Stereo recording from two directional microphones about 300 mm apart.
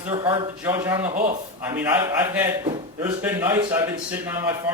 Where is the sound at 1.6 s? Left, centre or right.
Centre.